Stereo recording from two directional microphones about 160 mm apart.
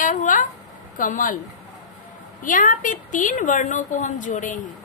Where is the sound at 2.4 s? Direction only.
55° left (ahead or behind).